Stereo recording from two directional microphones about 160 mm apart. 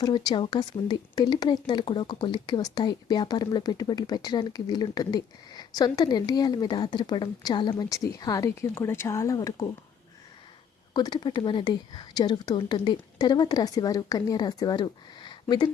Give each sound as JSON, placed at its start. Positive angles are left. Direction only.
{"t": 0.3, "sound": "speech", "side_deg": 30}
{"t": 10.9, "sound": "speech", "side_deg": 25}